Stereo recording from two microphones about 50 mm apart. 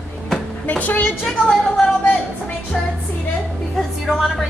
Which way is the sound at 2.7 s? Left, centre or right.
Centre.